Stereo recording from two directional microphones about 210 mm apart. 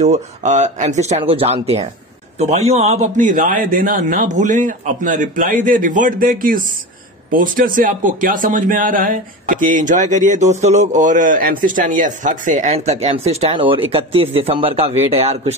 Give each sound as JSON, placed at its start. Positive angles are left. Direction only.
{"t": 0.0, "sound": "speech", "side_deg": -35}